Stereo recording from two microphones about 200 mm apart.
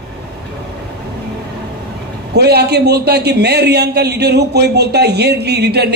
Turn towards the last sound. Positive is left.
turn(degrees=-55)  # may be behind; listen again after turning